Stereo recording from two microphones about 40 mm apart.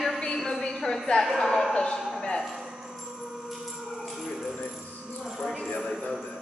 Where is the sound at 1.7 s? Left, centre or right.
Left.